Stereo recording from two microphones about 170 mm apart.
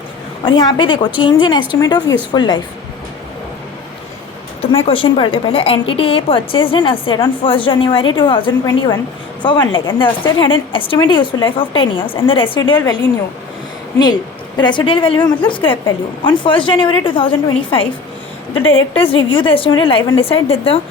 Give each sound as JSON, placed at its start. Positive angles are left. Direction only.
{"t": 0.4, "sound": "a woman's voice", "side_deg": 30}
{"t": 4.7, "sound": "a woman's voice", "side_deg": 30}
{"t": 14.6, "sound": "a woman's voice", "side_deg": 25}